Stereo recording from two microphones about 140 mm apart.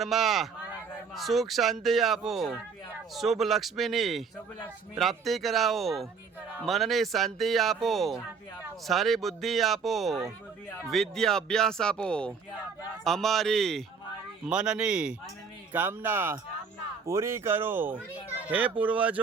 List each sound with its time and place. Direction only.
0.0 s speech: centre (ahead or behind)